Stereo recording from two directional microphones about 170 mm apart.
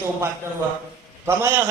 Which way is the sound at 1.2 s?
15° right (ahead or behind).